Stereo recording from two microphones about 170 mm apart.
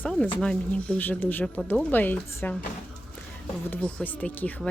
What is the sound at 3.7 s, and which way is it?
Speech, 10° left (ahead or behind).